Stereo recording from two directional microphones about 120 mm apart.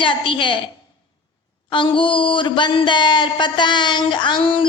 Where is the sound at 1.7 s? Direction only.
45° left (ahead or behind).